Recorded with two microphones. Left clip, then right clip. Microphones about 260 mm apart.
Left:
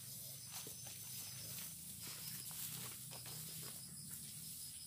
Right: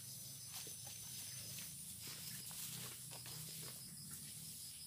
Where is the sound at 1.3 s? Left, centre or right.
Centre.